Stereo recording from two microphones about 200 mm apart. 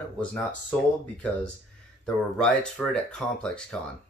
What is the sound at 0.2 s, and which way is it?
Speech, 5° left (ahead or behind).